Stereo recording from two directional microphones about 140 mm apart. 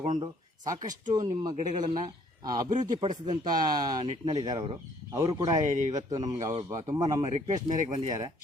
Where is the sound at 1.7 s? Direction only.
60° right (ahead or behind).